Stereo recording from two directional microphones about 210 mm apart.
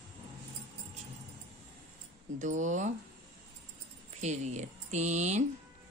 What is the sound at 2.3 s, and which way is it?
Speech, 35° right (ahead or behind).